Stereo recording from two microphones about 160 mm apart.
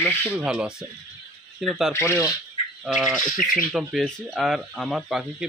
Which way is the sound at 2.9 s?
Centre (ahead or behind).